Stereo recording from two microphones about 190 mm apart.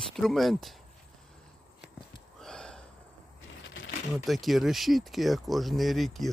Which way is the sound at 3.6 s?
70° left (ahead or behind).